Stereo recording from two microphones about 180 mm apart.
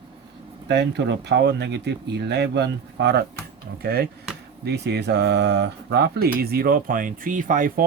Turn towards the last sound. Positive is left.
turn(degrees=-50)  # may be behind; listen again after turning